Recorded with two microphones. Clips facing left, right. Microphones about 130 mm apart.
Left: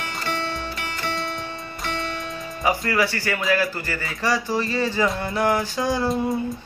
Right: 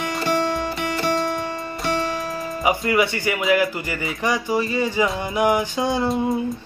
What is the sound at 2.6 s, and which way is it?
Speech, 20° right (ahead or behind).